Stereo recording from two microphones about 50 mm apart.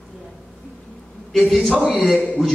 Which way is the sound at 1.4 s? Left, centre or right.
Centre.